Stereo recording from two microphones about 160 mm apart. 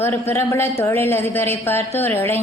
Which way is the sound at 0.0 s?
15° left (ahead or behind).